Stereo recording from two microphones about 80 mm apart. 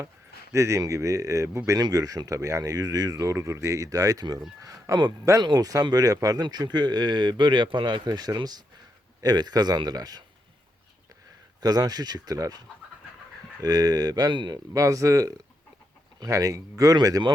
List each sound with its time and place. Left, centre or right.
0.5 s speech: right
5.4 s speech: right
11.6 s speech: right
14.7 s speech: right